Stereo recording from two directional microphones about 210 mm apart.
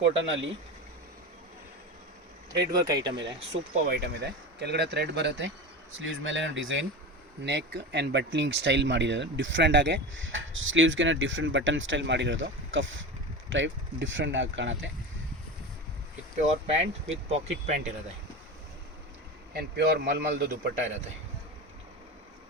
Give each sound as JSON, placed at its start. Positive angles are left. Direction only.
{"t": 0.2, "sound": "speech", "side_deg": -60}
{"t": 2.6, "sound": "speech", "side_deg": -15}
{"t": 3.2, "sound": "speech", "side_deg": -55}
{"t": 16.6, "sound": "speech", "side_deg": -30}
{"t": 19.5, "sound": "speech", "side_deg": -55}